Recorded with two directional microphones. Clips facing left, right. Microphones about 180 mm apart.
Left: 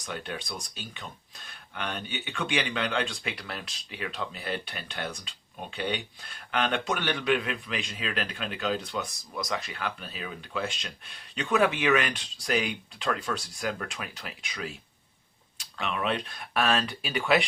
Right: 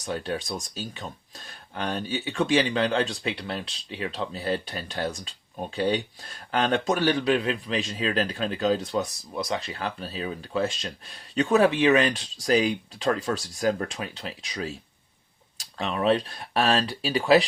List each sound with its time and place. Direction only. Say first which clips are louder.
0.0 s speech: right 7 dB; 35° right (ahead or behind)